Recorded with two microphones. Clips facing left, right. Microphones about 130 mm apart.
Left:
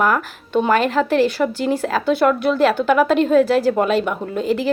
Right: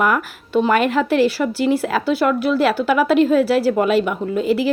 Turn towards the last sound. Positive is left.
turn(degrees=-5)  # may be behind; listen again after turning